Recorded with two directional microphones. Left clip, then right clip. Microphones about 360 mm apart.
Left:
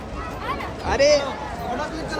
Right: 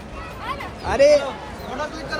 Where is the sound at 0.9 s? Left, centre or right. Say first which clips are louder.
Right 3 dB; right.